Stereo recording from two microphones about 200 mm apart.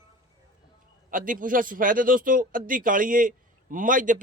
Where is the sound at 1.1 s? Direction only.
40° right (ahead or behind).